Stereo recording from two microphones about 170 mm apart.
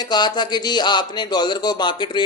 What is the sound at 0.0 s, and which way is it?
Speech, 25° left (ahead or behind).